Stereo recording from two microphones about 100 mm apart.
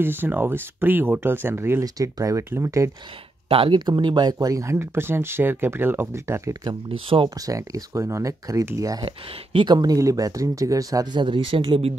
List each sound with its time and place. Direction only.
0.0 s speech: 20° right (ahead or behind)
2.0 s speech: 35° right (ahead or behind)
3.4 s speech: 70° right (ahead or behind)
3.7 s speech: 45° right (ahead or behind)
9.0 s speech: 60° right (ahead or behind)
9.9 s speech: 35° right (ahead or behind)
11.1 s speech: 55° right (ahead or behind)